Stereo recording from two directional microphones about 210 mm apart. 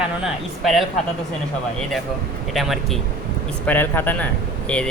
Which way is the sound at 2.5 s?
Centre (ahead or behind).